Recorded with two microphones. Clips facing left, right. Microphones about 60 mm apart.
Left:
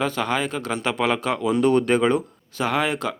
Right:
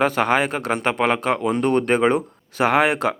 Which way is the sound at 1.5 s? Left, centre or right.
Centre.